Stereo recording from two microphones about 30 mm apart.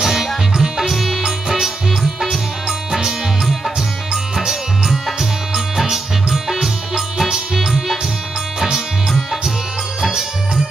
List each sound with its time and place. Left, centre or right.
0.0 s music: centre
2.9 s music: centre
4.8 s music: centre